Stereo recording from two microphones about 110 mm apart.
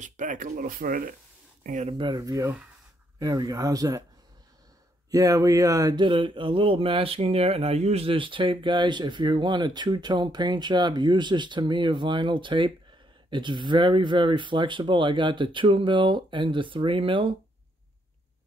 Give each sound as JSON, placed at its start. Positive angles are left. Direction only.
{"t": 2.0, "sound": "speech", "side_deg": -40}
{"t": 5.1, "sound": "speech", "side_deg": -30}
{"t": 6.0, "sound": "speech", "side_deg": -50}